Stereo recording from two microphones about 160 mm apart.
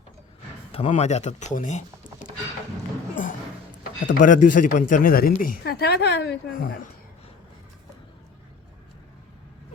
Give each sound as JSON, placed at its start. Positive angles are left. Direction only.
{"t": 0.7, "sound": "speech", "side_deg": 45}
{"t": 4.0, "sound": "speech", "side_deg": 55}